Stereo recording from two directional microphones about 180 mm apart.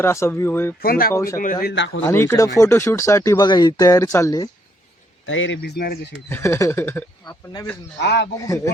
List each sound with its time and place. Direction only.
0.0 s speech: 15° left (ahead or behind)
0.8 s speech: 55° left (ahead or behind)
1.1 s speech: 15° left (ahead or behind)
1.6 s speech: 80° left
2.0 s speech: 15° left (ahead or behind)
5.2 s speech: 90° left; by 6.1 s 60° left (ahead or behind)
6.2 s speech: 15° left (ahead or behind)
7.9 s speech: 70° left (ahead or behind)
8.4 s speech: 20° left (ahead or behind)